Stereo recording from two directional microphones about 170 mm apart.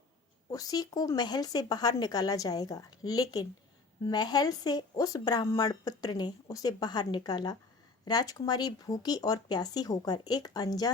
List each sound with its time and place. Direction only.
0.5 s speech: 20° left (ahead or behind)